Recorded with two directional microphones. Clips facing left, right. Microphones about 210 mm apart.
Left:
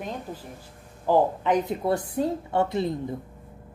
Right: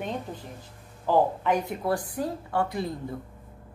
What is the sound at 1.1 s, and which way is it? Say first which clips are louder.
A woman's voice: left 2 dB; 15° left (ahead or behind).